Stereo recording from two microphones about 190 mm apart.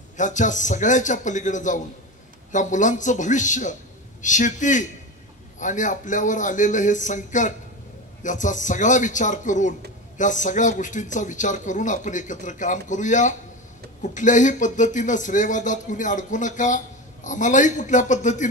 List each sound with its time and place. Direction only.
0.2 s speech: 40° left (ahead or behind)